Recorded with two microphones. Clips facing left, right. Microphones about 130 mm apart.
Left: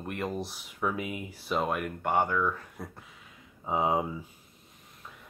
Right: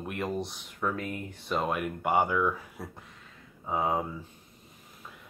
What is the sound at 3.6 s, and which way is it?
Speech, 20° left (ahead or behind).